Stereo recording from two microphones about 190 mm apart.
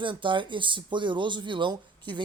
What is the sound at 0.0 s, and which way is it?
Speech, 25° right (ahead or behind).